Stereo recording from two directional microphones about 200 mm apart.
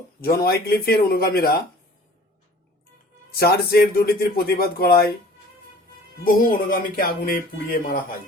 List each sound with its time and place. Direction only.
0.2 s speech: 50° left (ahead or behind)
3.3 s speech: 50° left (ahead or behind)
6.2 s speech: 45° left (ahead or behind)